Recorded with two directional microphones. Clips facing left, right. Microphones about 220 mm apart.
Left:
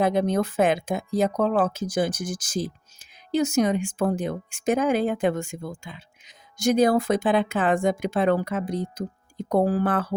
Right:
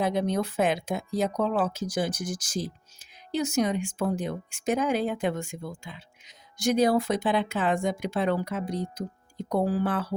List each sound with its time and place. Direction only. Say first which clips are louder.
0.0 s speech: left 4 dB; 50° left (ahead or behind)